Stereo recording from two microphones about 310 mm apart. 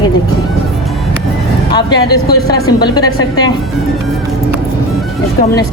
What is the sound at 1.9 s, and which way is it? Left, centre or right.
Speech, left.